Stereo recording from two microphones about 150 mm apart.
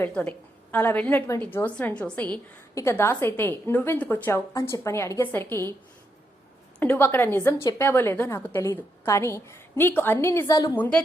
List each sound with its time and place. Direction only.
0.0 s a woman's voice: 10° left (ahead or behind)
6.7 s a woman's voice: 10° left (ahead or behind)
10.4 s a woman's voice: 25° left (ahead or behind)